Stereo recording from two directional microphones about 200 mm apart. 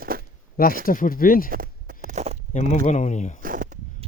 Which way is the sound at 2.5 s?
35° left (ahead or behind).